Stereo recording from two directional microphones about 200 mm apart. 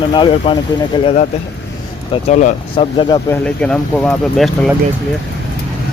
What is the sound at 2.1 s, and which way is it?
Speech, 35° left (ahead or behind).